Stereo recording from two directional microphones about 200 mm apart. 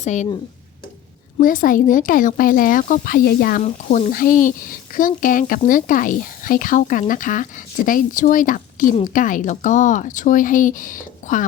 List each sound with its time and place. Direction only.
0.0 s speech: 35° left (ahead or behind)
1.4 s a woman's voice: 40° left (ahead or behind)